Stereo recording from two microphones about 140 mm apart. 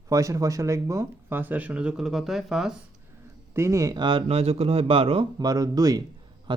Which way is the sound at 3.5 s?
20° right (ahead or behind).